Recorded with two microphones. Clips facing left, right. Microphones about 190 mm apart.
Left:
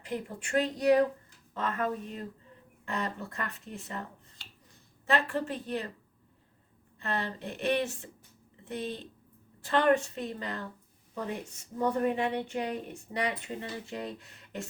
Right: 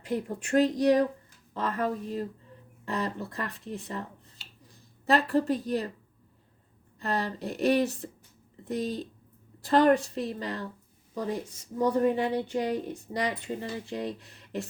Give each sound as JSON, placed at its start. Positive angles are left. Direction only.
{"t": 0.3, "sound": "a woman's voice", "side_deg": -40}
{"t": 5.0, "sound": "a woman's voice", "side_deg": -35}
{"t": 7.0, "sound": "a woman's voice", "side_deg": -40}